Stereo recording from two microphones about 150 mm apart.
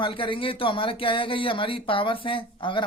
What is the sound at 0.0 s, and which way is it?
A woman's voice, 35° left (ahead or behind).